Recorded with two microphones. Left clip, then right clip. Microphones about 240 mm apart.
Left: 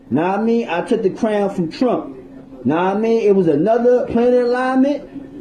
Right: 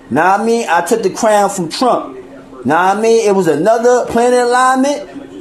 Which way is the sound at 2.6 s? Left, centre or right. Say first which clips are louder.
Right 6 dB; centre.